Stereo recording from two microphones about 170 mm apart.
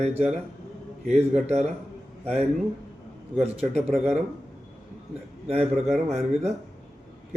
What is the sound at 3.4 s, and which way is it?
Speech, 40° right (ahead or behind).